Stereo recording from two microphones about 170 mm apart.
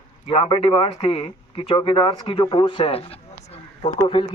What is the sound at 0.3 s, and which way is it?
Speech, 30° left (ahead or behind).